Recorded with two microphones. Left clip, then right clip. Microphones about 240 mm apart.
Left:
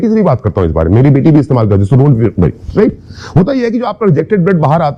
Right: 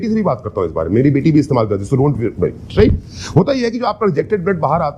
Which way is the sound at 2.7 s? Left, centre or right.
Left.